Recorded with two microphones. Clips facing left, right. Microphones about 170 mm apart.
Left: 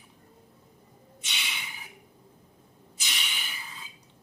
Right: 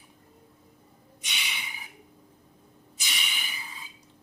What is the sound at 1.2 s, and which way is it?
Snort, 10° right (ahead or behind).